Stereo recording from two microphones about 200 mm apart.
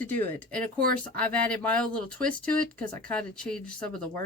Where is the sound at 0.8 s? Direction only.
45° right (ahead or behind).